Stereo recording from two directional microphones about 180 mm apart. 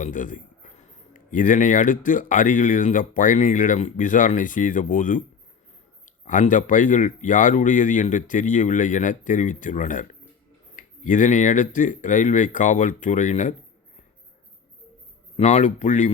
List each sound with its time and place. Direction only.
0.0 s a man's voice: 45° left (ahead or behind)
6.2 s speech: 45° left (ahead or behind)
15.4 s speech: 40° left (ahead or behind)